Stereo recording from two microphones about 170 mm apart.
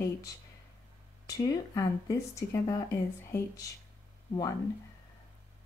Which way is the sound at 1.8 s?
20° left (ahead or behind).